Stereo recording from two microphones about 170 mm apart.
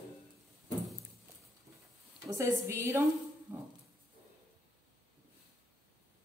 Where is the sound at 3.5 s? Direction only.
15° right (ahead or behind).